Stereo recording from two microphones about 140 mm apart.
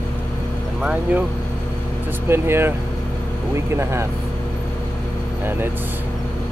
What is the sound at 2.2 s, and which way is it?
Speech, 15° right (ahead or behind).